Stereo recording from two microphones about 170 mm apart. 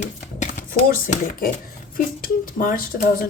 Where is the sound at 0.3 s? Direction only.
50° left (ahead or behind).